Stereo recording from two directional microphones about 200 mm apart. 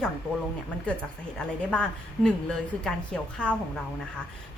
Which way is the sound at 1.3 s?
5° left (ahead or behind).